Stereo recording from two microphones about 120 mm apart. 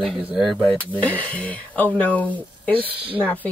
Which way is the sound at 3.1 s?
15° right (ahead or behind).